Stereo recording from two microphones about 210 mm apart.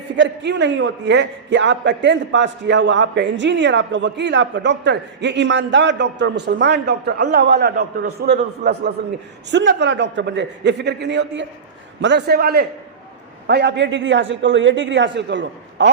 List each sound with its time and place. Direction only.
0.2 s a man's voice: 55° right (ahead or behind)